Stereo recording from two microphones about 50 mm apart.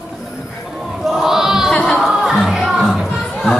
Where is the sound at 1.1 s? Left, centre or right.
Centre.